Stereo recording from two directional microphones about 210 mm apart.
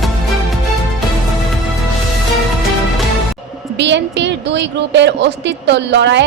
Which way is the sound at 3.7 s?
55° right (ahead or behind).